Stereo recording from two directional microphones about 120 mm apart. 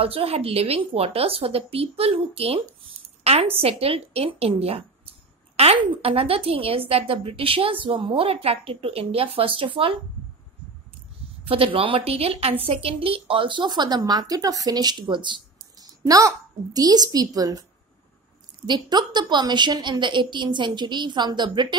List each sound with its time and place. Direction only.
0.0 s a woman's voice: 55° right (ahead or behind)
11.4 s a woman's voice: 50° right (ahead or behind); by 17.6 s 30° right (ahead or behind)
18.7 s a woman's voice: 35° right (ahead or behind)